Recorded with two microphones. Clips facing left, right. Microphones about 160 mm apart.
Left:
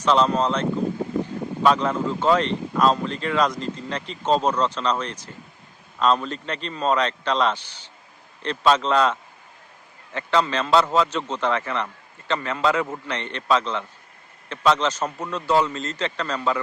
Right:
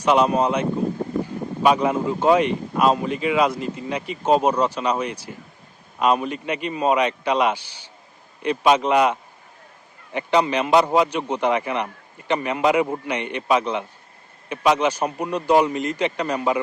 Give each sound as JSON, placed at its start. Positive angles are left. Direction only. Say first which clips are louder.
{"t": 0.0, "sound": "speech", "louder": "right 2 dB", "side_deg": -10}